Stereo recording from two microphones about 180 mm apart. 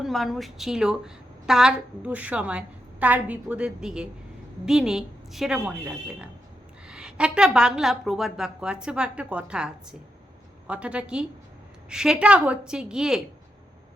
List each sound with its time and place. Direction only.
0.0 s a woman's voice: centre (ahead or behind)